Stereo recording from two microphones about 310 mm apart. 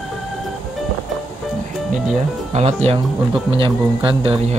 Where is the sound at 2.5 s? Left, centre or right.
Centre.